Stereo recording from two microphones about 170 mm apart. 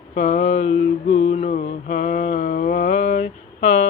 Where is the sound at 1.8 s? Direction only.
45° left (ahead or behind).